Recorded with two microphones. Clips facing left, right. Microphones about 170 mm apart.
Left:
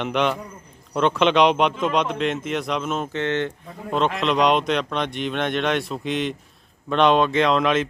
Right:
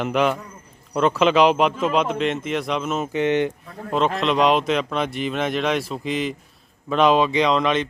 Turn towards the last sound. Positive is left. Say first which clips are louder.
# even
turn(degrees=0)  # may be behind; listen again after turning